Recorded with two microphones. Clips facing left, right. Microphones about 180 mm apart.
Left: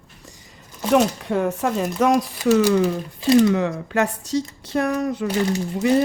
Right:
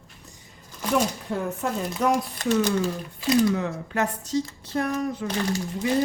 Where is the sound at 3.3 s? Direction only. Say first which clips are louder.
Left 6 dB; 90° left.